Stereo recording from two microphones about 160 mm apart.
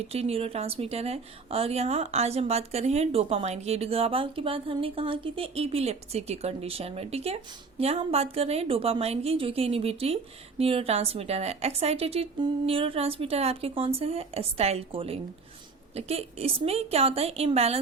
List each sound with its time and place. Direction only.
0.1 s a woman's voice: 40° right (ahead or behind)